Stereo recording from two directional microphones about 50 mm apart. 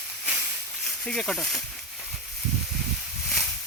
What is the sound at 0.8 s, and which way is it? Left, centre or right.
Speech, centre.